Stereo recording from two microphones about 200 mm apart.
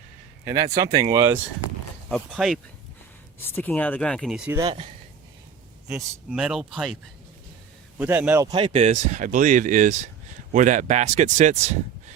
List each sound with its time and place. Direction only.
0.4 s speech: 20° right (ahead or behind)
1.1 s speech: 15° right (ahead or behind)
2.0 s speech: centre (ahead or behind)
5.9 s speech: 5° right (ahead or behind)
7.9 s speech: 10° right (ahead or behind); by 12.1 s 35° right (ahead or behind)